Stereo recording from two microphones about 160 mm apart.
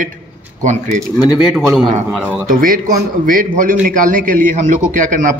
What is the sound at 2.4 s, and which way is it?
A man's voice, 60° right (ahead or behind).